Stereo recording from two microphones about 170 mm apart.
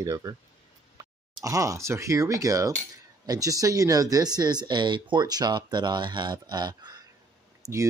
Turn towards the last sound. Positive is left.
turn(degrees=-20)  # may be behind; listen again after turning